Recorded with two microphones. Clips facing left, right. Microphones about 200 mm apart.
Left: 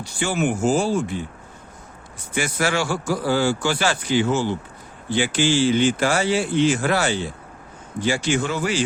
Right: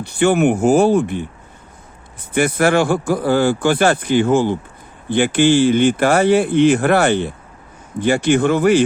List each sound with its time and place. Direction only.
0.0 s speech: 60° right (ahead or behind)
2.3 s speech: 55° right (ahead or behind)